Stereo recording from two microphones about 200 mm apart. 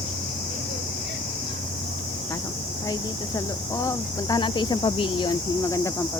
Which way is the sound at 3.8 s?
20° left (ahead or behind).